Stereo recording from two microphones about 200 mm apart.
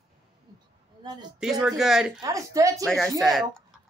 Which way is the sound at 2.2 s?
15° right (ahead or behind).